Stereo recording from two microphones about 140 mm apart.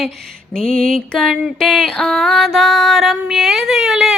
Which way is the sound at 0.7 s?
80° right.